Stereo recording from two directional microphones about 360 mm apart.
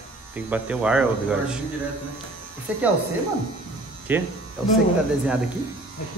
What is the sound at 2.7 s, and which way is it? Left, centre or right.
Speech, centre.